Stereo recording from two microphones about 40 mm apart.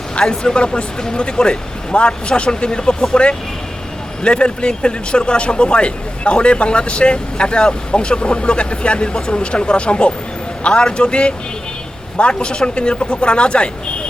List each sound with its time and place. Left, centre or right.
0.2 s speech: left
4.2 s speech: left